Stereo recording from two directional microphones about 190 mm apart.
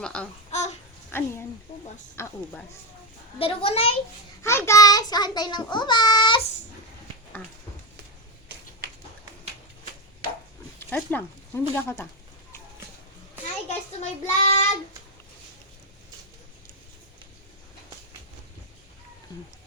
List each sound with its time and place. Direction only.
0.0 s speech: 5° left (ahead or behind)
0.5 s babbling: 35° left (ahead or behind)
1.1 s speech: 10° left (ahead or behind)
3.3 s a child's voice: 30° left (ahead or behind)
4.4 s a child's voice: 15° left (ahead or behind)
10.8 s speech: 10° left (ahead or behind)
13.7 s child singing: 35° left (ahead or behind)